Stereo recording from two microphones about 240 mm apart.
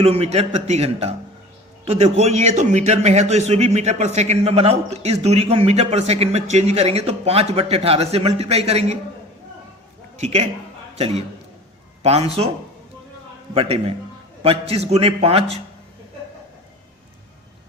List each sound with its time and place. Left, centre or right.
0.0 s a man's voice: right
10.2 s a man's voice: right
13.5 s a man's voice: right